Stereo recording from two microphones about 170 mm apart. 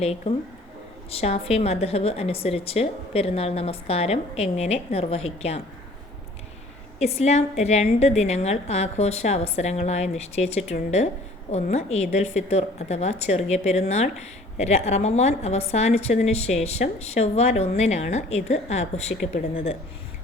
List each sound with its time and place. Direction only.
0.0 s a woman's voice: 35° left (ahead or behind)
7.0 s a woman's voice: 40° left (ahead or behind)